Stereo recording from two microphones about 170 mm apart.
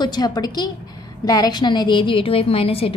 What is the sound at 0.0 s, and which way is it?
A woman's voice, 25° left (ahead or behind).